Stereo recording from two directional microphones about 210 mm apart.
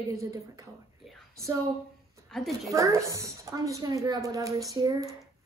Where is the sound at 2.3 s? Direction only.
Centre (ahead or behind).